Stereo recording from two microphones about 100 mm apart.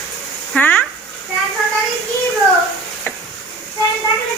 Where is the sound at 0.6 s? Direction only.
15° left (ahead or behind).